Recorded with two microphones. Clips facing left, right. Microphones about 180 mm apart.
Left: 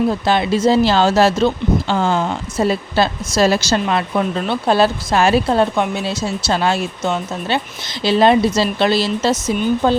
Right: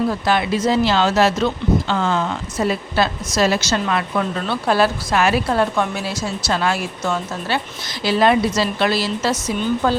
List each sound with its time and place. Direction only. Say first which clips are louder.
0.1 s speech: left 3 dB; 25° left (ahead or behind)